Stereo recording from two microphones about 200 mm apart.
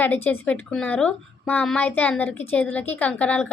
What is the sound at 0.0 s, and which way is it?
Speech, 10° left (ahead or behind).